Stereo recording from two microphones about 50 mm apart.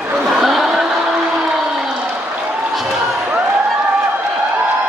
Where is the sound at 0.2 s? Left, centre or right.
Centre.